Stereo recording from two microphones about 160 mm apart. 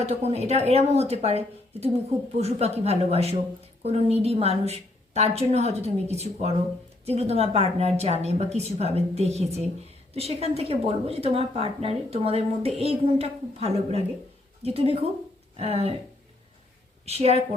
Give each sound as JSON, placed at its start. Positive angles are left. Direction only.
{"t": 0.0, "sound": "speech", "side_deg": -40}
{"t": 17.1, "sound": "speech", "side_deg": -40}